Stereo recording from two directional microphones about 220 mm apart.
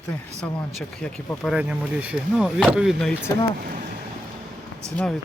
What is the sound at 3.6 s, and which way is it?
Speech, 40° right (ahead or behind).